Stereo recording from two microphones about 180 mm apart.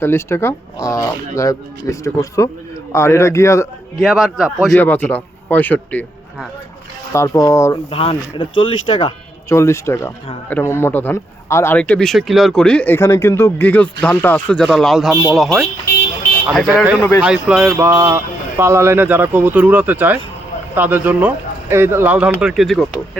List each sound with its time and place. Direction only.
0.0 s speech: 15° left (ahead or behind)
4.0 s speech: centre (ahead or behind)
4.8 s speech: 10° left (ahead or behind)
7.1 s speech: 15° left (ahead or behind)
7.9 s speech: 30° left (ahead or behind)
9.5 s speech: 15° left (ahead or behind)